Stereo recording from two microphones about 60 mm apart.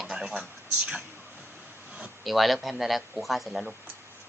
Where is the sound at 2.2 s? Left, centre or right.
Centre.